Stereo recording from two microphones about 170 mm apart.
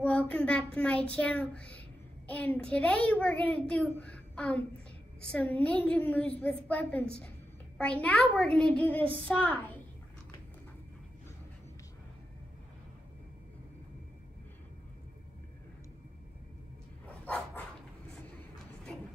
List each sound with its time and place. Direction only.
0.0 s child singing: 10° left (ahead or behind)
5.2 s a woman's voice: 5° left (ahead or behind)